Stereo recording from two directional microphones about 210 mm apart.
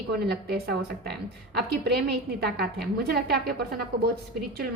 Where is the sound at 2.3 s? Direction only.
50° right (ahead or behind).